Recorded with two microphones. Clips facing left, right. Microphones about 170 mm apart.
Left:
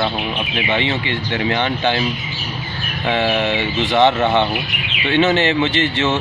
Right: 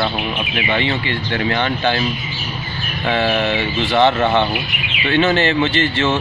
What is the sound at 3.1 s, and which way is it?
Speech, 15° left (ahead or behind).